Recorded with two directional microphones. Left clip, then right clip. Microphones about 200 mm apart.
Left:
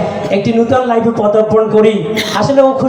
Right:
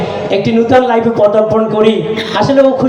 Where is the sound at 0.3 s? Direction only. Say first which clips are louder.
Right 2 dB; 20° right (ahead or behind).